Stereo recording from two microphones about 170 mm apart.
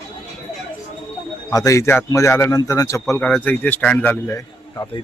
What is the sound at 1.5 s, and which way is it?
A man's voice, 20° left (ahead or behind).